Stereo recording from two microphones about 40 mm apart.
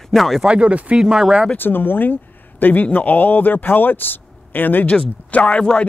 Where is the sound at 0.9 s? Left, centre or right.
Centre.